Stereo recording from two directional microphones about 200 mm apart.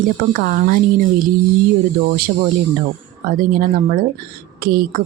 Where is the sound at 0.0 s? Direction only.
45° right (ahead or behind).